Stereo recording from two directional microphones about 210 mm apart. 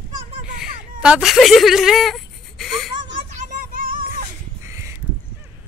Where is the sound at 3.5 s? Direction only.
40° right (ahead or behind).